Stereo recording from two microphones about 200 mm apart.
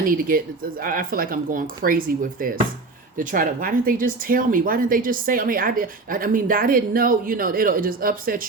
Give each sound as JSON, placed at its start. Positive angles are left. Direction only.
{"t": 0.0, "sound": "speech", "side_deg": -45}